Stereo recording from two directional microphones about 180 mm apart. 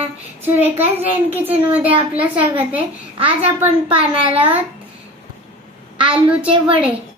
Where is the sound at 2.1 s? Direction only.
10° right (ahead or behind).